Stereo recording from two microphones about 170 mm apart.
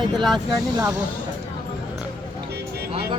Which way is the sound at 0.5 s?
25° right (ahead or behind).